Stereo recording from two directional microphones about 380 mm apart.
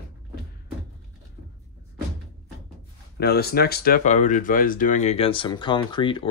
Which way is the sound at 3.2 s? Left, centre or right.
Left.